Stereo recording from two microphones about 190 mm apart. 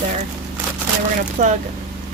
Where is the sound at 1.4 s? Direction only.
40° right (ahead or behind).